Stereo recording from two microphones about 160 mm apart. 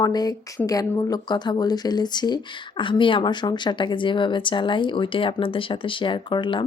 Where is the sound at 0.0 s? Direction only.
25° left (ahead or behind).